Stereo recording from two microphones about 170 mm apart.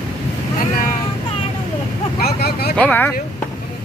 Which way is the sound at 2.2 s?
65° left (ahead or behind).